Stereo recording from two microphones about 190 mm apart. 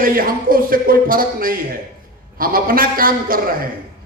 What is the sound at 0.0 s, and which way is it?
A man's voice, 50° right (ahead or behind).